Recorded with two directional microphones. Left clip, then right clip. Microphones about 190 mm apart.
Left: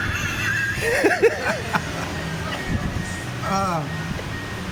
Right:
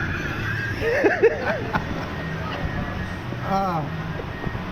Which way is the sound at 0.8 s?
15° left (ahead or behind).